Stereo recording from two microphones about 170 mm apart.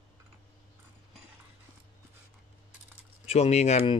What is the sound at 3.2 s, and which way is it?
Speech, 40° left (ahead or behind).